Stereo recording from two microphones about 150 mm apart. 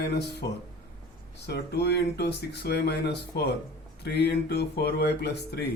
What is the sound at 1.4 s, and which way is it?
Speech, 90° left.